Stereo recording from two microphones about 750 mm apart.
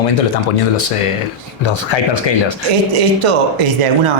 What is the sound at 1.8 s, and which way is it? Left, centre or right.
Speech, left.